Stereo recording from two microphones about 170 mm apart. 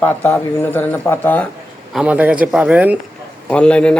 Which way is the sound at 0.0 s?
10° left (ahead or behind).